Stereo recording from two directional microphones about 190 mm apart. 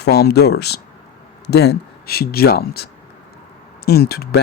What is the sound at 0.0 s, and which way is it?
Speech, 55° left (ahead or behind).